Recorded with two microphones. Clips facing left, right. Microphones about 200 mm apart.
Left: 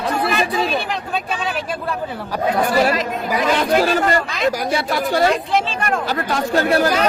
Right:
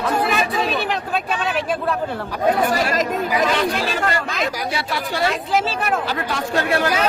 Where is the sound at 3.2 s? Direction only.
45° left (ahead or behind).